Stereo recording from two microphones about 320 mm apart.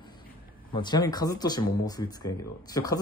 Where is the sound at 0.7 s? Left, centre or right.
Centre.